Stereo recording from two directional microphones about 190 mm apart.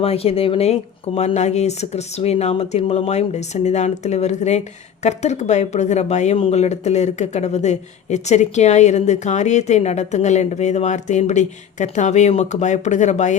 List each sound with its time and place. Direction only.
0.0 s speech: 30° left (ahead or behind)